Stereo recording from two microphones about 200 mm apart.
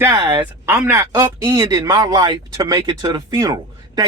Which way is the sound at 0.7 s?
10° right (ahead or behind).